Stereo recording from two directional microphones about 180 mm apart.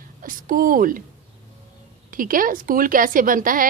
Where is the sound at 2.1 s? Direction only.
50° right (ahead or behind).